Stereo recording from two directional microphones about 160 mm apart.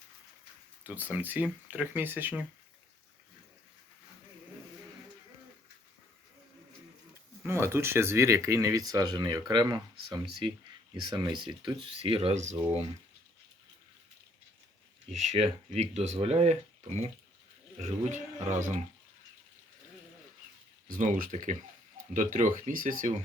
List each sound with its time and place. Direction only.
0.9 s speech: 10° right (ahead or behind)
7.4 s speech: 15° right (ahead or behind); by 12.9 s 35° right (ahead or behind)
15.1 s speech: 40° right (ahead or behind)
20.8 s speech: 55° right (ahead or behind)